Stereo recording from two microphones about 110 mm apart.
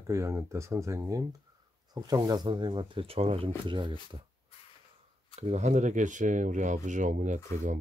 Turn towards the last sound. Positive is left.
turn(degrees=-90)